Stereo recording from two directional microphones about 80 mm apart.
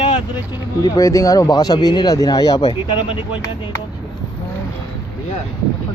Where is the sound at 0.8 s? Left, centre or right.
Left.